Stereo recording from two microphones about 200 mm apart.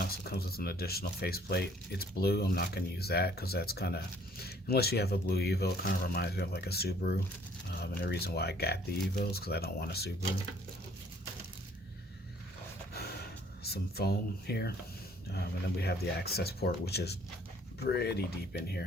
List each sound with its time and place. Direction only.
0.0 s speech: 50° left (ahead or behind)
13.7 s speech: 50° left (ahead or behind)
15.8 s speech: 55° left (ahead or behind)